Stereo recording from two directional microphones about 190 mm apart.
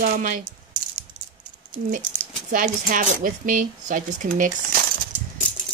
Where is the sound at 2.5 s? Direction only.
45° right (ahead or behind).